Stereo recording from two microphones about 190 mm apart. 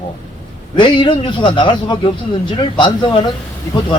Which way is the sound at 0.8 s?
25° left (ahead or behind).